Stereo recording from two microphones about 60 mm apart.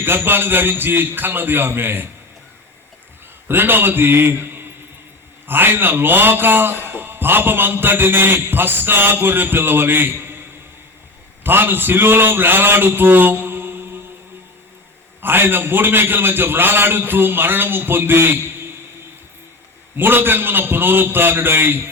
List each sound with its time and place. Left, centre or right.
0.0 s a man's voice: right
3.5 s a man's voice: right
11.4 s a man's voice: right
15.2 s a man's voice: right
20.0 s a man's voice: right